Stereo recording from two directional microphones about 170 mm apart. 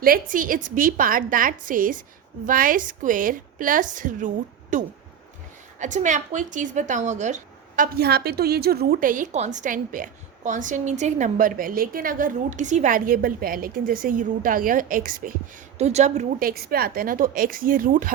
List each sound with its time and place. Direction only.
0.0 s a woman's voice: 55° right (ahead or behind)
7.9 s a woman's voice: 70° right (ahead or behind)
15.8 s a woman's voice: 40° right (ahead or behind)
16.4 s a woman's voice: 60° right (ahead or behind)